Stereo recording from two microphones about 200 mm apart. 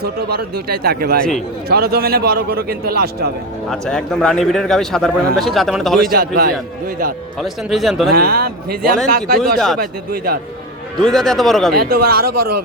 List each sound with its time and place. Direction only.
0.0 s a man's voice: 50° right (ahead or behind)
3.7 s a man's voice: centre (ahead or behind)
6.1 s a man's voice: 50° right (ahead or behind)
7.4 s a man's voice: centre (ahead or behind)
8.1 s a man's voice: 50° right (ahead or behind)
9.4 s a man's voice: centre (ahead or behind)
9.8 s a man's voice: 45° right (ahead or behind)
11.0 s a man's voice: centre (ahead or behind)
11.7 s a man's voice: 50° right (ahead or behind)